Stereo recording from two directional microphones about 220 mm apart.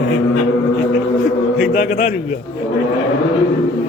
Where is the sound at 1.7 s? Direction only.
35° left (ahead or behind).